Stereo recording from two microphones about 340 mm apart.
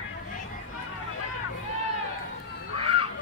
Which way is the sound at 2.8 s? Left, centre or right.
Centre.